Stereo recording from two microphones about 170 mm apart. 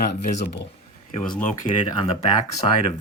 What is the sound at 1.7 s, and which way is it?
Speech, 30° left (ahead or behind).